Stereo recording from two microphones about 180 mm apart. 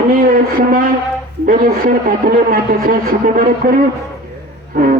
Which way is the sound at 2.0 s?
50° right (ahead or behind).